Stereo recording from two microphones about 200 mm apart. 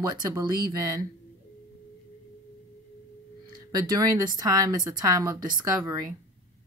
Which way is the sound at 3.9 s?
15° right (ahead or behind).